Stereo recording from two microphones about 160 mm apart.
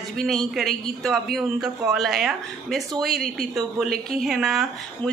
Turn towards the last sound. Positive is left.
turn(degrees=0)  # may be behind; listen again after turning